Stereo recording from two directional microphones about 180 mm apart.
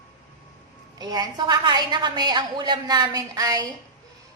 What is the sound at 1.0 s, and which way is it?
A woman's voice, 20° right (ahead or behind).